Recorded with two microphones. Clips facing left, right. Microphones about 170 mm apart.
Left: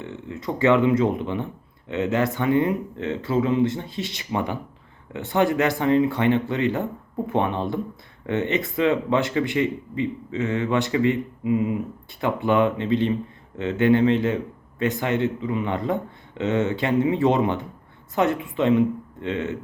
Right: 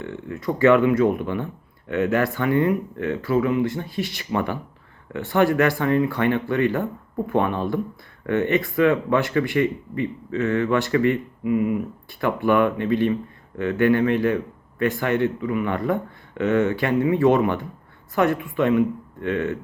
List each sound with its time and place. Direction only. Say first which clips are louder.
0.0 s speech: right 3 dB; 20° left (ahead or behind)